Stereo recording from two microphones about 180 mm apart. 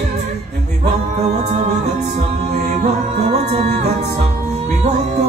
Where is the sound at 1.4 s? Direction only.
40° right (ahead or behind).